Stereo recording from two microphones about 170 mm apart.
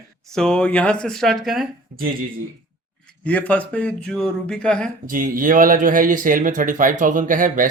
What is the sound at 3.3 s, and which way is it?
Speech, 10° left (ahead or behind).